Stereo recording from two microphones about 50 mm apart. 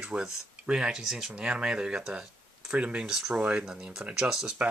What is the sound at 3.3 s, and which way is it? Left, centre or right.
Speech, right.